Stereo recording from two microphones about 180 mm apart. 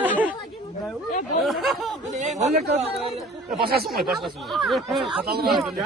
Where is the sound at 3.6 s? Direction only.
60° right (ahead or behind).